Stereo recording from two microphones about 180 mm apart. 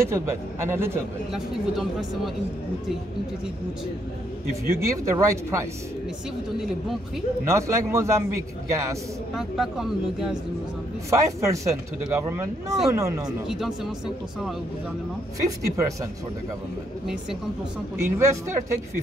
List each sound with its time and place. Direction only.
0.0 s speech: 15° right (ahead or behind)
1.3 s speech: centre (ahead or behind)
4.6 s speech: 15° right (ahead or behind)
7.4 s speech: 15° right (ahead or behind)
9.3 s speech: centre (ahead or behind)
11.1 s speech: 15° right (ahead or behind)
13.5 s speech: centre (ahead or behind)
15.7 s speech: 20° right (ahead or behind)
17.0 s speech: centre (ahead or behind)
17.9 s speech: 15° right (ahead or behind)